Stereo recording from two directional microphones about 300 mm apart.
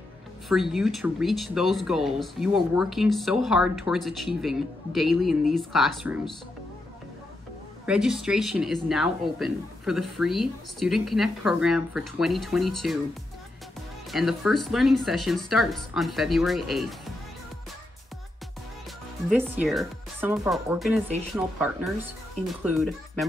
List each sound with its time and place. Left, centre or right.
0.5 s speech: centre
7.8 s speech: centre
14.1 s speech: centre
19.2 s speech: centre
22.3 s speech: centre